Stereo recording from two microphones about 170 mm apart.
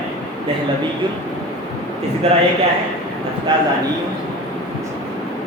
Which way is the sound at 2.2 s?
35° right (ahead or behind).